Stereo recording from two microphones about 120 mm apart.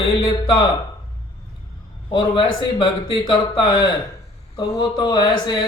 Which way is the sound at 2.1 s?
45° left (ahead or behind).